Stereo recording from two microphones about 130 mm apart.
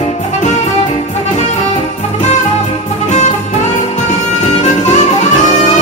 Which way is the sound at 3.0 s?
60° left (ahead or behind).